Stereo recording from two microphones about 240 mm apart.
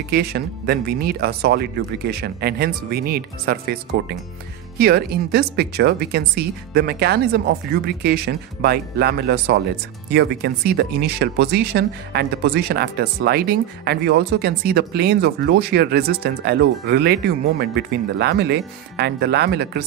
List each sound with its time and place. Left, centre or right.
0.1 s speech: right